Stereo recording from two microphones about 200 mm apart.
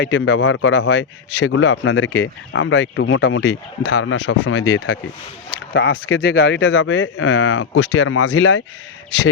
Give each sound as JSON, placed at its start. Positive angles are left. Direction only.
{"t": 0.0, "sound": "speech", "side_deg": 90}
{"t": 5.5, "sound": "speech", "side_deg": 75}
{"t": 7.9, "sound": "speech", "side_deg": 90}